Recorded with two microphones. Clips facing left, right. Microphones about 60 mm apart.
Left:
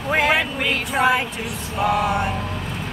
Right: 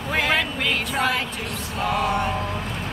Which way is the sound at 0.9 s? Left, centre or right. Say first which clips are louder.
Left 5 dB; centre.